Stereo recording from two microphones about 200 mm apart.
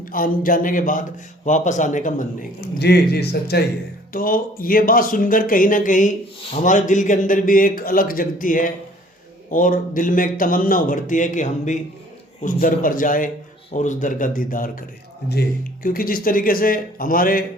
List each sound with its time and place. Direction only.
0.0 s speech: 45° left (ahead or behind)
2.6 s speech: 55° left (ahead or behind)